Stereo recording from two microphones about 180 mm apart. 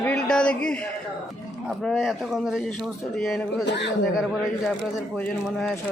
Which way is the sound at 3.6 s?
75° left (ahead or behind).